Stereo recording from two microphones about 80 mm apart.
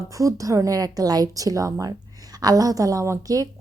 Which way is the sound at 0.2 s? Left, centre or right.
Right.